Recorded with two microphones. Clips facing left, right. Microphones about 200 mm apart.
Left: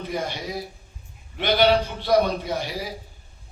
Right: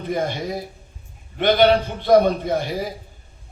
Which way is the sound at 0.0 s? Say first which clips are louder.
Right 5 dB; 50° right (ahead or behind).